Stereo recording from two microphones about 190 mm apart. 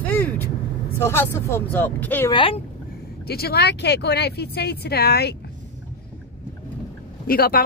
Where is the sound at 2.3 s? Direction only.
30° left (ahead or behind).